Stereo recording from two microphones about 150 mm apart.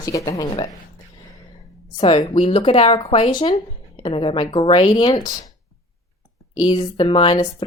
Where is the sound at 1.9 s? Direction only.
35° left (ahead or behind).